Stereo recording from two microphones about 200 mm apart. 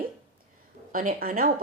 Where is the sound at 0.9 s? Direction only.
40° right (ahead or behind).